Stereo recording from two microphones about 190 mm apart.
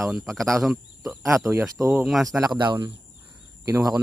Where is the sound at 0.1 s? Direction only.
Centre (ahead or behind).